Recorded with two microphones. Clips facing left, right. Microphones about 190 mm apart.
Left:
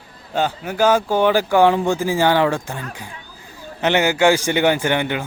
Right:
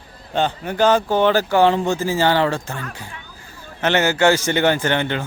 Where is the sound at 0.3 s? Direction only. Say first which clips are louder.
Even; 10° left (ahead or behind).